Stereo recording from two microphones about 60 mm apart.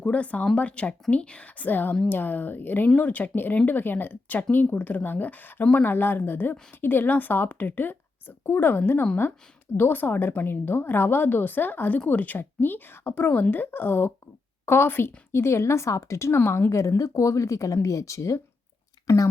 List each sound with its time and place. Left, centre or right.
0.0 s a woman's voice: left